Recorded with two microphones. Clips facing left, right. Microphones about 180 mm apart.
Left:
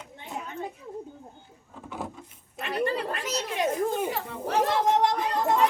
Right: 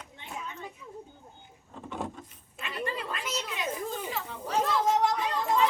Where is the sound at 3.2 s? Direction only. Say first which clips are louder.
Left 6 dB; 55° left (ahead or behind).